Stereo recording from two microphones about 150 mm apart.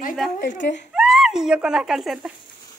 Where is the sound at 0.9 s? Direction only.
5° right (ahead or behind).